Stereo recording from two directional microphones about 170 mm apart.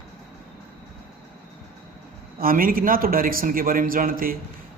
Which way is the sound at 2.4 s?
55° right (ahead or behind).